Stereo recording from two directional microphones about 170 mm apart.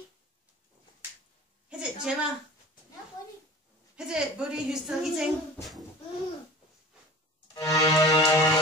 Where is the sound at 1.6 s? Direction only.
5° right (ahead or behind).